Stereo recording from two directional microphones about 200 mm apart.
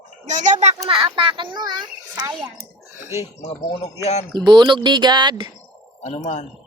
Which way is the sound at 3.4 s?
35° left (ahead or behind).